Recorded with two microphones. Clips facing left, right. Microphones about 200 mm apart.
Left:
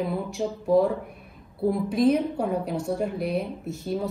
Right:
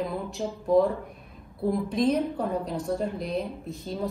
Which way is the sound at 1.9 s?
5° left (ahead or behind).